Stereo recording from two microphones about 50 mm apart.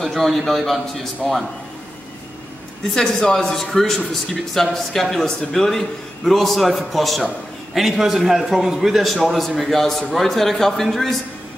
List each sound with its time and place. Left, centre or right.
0.0 s a man's voice: centre
2.9 s a man's voice: centre